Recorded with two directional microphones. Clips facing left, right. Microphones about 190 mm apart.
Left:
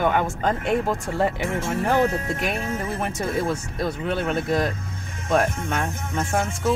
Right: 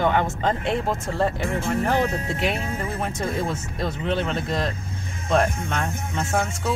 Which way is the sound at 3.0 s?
5° left (ahead or behind).